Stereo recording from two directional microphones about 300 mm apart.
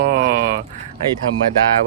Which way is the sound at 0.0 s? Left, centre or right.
Right.